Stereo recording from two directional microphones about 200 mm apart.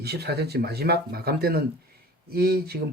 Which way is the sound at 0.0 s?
55° right (ahead or behind).